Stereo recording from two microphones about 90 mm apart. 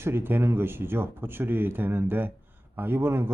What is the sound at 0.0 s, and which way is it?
Speech, 25° right (ahead or behind).